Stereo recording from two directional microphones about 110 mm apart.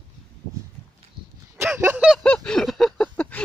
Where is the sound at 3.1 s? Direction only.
15° left (ahead or behind).